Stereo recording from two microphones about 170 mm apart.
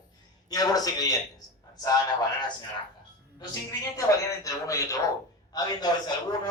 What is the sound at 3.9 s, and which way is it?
A man's voice, 20° left (ahead or behind).